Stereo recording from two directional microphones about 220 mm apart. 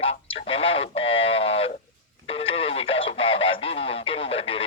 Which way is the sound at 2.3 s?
25° left (ahead or behind).